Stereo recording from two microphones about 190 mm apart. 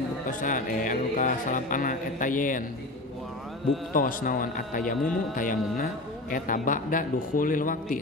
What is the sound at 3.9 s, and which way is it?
Speech, 45° left (ahead or behind).